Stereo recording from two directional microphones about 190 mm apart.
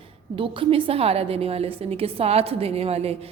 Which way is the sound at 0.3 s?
25° right (ahead or behind).